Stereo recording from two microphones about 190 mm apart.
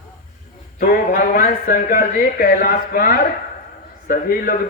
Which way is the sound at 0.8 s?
50° left (ahead or behind).